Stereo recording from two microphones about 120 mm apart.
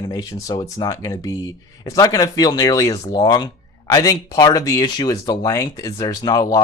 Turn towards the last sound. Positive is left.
turn(degrees=35)  # may be behind; listen again after turning